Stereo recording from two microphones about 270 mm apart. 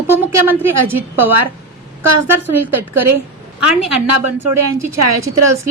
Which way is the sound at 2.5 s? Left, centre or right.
Right.